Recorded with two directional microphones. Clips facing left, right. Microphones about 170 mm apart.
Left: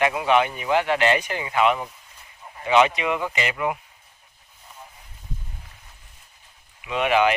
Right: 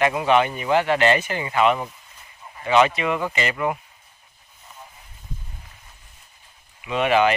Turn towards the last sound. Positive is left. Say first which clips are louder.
# right 1 dB
turn(degrees=10)  # may be behind; listen again after turning